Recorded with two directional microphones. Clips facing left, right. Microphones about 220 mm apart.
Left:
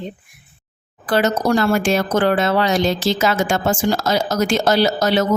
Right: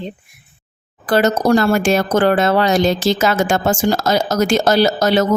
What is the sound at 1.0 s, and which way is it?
A woman's voice, 40° right (ahead or behind).